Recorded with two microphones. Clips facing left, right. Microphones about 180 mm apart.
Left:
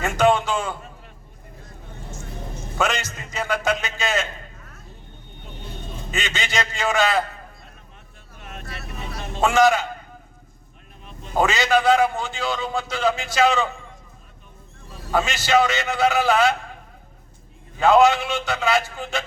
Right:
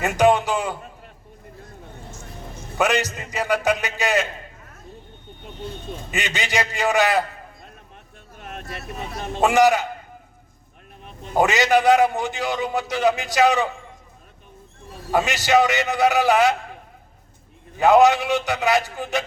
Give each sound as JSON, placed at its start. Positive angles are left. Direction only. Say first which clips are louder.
{"t": 0.0, "sound": "a sound", "louder": "right 1 dB", "side_deg": -15}
{"t": 2.7, "sound": "a man's voice", "louder": "right 3 dB", "side_deg": -15}
{"t": 6.1, "sound": "a man's voice", "louder": "right 1 dB", "side_deg": -15}
{"t": 8.4, "sound": "vehicle", "louder": "right 3 dB", "side_deg": -50}
{"t": 9.4, "sound": "a man's voice", "louder": "right 1 dB", "side_deg": -15}
{"t": 11.3, "sound": "a man's voice", "louder": "right 2 dB", "side_deg": -20}
{"t": 15.1, "sound": "a man's voice", "louder": "right 1 dB", "side_deg": -15}
{"t": 17.7, "sound": "a man's voice", "louder": "right 1 dB", "side_deg": -15}